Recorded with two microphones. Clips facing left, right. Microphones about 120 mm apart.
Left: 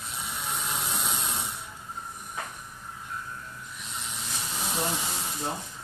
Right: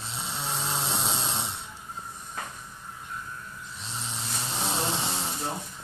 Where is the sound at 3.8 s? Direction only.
30° right (ahead or behind).